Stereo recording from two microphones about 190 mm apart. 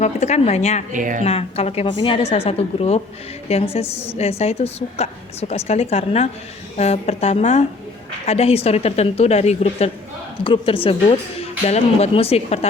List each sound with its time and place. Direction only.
0.0 s a woman's voice: 35° left (ahead or behind)
0.9 s speech: 45° right (ahead or behind)
1.2 s a woman's voice: 30° left (ahead or behind)